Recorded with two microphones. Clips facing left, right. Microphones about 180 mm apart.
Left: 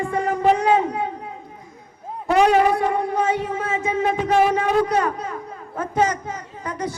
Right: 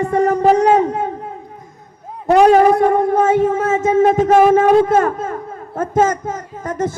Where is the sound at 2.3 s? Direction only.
45° right (ahead or behind).